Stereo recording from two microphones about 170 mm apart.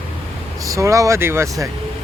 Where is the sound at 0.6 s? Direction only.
20° right (ahead or behind).